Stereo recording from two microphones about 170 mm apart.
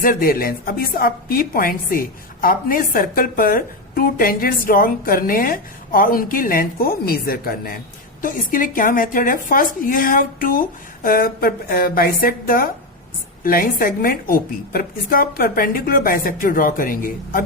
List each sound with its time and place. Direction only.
0.0 s a woman's voice: 55° left (ahead or behind)